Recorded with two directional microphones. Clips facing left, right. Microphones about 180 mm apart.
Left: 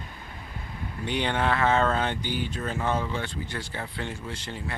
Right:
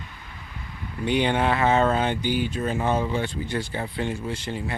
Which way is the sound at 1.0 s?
15° right (ahead or behind).